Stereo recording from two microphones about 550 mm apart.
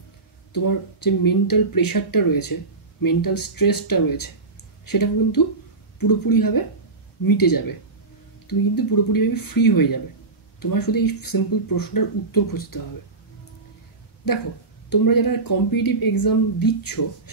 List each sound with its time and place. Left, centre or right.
0.5 s speech: left
14.9 s speech: left